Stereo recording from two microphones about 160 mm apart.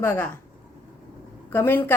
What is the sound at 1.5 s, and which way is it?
Speech, 15° left (ahead or behind).